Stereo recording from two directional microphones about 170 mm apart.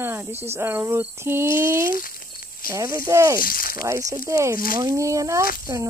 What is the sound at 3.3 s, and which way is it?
Speech, 55° left (ahead or behind).